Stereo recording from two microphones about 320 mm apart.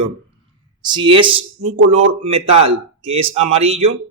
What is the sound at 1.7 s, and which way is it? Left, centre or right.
Speech, right.